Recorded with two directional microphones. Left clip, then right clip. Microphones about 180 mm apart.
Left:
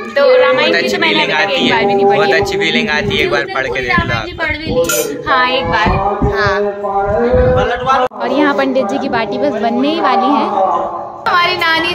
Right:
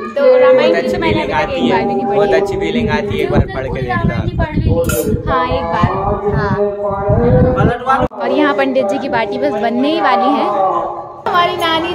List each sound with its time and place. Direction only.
0.2 s a woman's voice: centre (ahead or behind)
1.3 s a woman's voice: 20° right (ahead or behind)
1.8 s a woman's voice: centre (ahead or behind)
2.3 s speech: 10° right (ahead or behind)
5.3 s a woman's voice: 5° left (ahead or behind)
8.4 s a woman's voice: centre (ahead or behind)